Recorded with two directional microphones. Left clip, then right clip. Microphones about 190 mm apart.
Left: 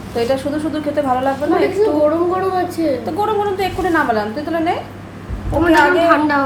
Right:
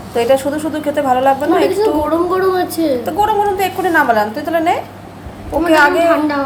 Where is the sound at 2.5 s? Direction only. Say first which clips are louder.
Right 2 dB; 55° right (ahead or behind).